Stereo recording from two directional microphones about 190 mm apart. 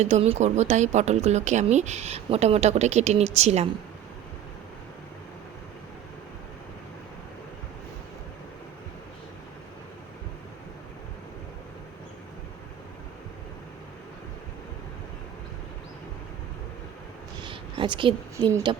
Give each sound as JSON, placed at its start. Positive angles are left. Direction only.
{"t": 0.0, "sound": "speech", "side_deg": -35}
{"t": 17.4, "sound": "a woman's voice", "side_deg": -25}